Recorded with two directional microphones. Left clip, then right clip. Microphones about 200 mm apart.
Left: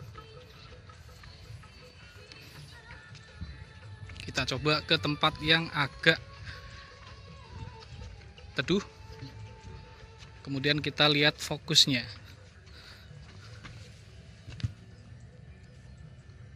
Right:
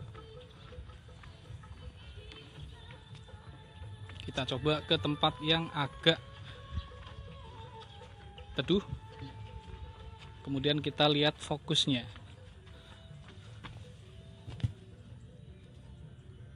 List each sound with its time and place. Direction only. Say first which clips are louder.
4.1 s a sound: left 4 dB; centre (ahead or behind)
4.6 s speech: left 3 dB; centre (ahead or behind)
8.5 s speech: left 2 dB; centre (ahead or behind)
10.4 s speech: left 3 dB; centre (ahead or behind)
14.6 s music: left 1 dB; 15° left (ahead or behind)